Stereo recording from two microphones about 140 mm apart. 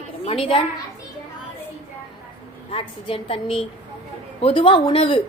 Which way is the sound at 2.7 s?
40° left (ahead or behind).